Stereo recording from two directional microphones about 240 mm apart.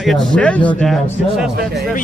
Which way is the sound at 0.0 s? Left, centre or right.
Centre.